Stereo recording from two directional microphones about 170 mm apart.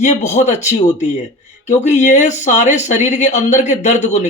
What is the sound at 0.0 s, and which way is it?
A man's voice, 45° left (ahead or behind).